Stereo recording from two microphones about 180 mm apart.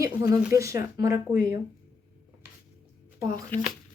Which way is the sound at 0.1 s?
15° right (ahead or behind).